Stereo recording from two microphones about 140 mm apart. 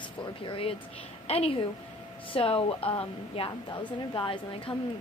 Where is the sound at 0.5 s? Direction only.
40° left (ahead or behind).